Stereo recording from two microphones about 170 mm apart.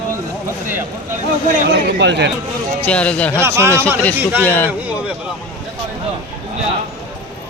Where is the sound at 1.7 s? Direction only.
85° right.